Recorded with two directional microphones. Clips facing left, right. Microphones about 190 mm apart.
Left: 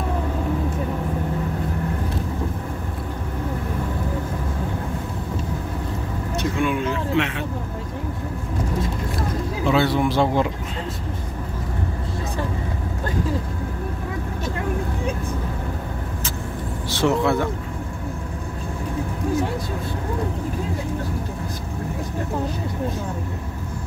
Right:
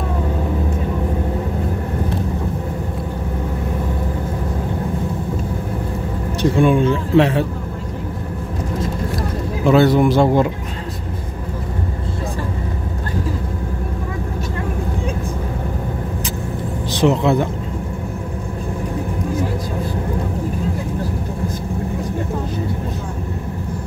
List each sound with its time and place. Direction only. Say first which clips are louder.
6.4 s speech: right 9 dB; 35° right (ahead or behind)
9.7 s speech: right 7 dB; 45° right (ahead or behind)
16.9 s speech: right 4 dB; 20° right (ahead or behind)